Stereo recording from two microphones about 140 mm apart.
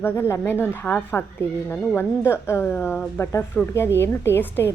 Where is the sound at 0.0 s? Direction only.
15° left (ahead or behind).